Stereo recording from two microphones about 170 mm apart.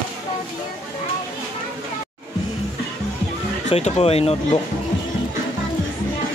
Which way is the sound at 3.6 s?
40° left (ahead or behind).